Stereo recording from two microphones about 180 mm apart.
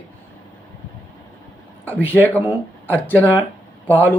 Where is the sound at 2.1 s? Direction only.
10° left (ahead or behind).